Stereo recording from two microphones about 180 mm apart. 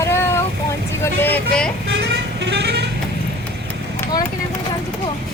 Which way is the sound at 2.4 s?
70° right (ahead or behind).